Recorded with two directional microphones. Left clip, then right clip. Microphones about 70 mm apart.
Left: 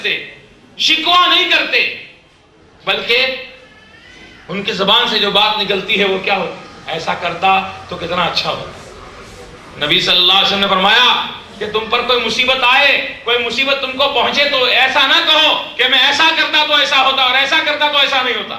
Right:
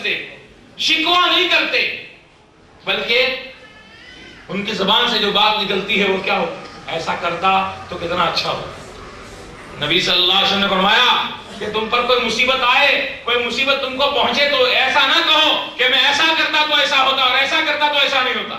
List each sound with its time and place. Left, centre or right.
0.8 s a man's voice: left
2.8 s a man's voice: left
4.4 s a man's voice: left
9.7 s a man's voice: left